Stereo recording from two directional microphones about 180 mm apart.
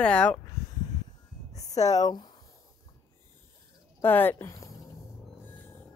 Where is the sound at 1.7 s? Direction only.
20° left (ahead or behind).